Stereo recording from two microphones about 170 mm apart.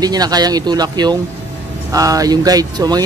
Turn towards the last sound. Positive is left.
turn(degrees=-25)  # may be behind; listen again after turning